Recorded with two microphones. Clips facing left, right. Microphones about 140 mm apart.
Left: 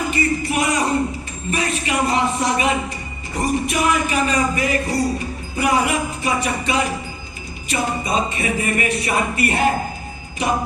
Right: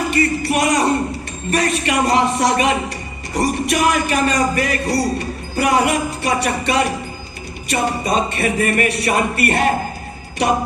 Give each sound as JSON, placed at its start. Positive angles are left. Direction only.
{"t": 0.1, "sound": "speech", "side_deg": -70}